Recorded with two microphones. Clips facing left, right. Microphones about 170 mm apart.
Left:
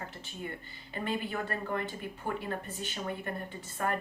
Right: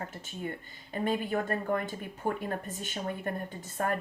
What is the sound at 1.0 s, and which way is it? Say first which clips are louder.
Speech: right 4 dB; 45° right (ahead or behind).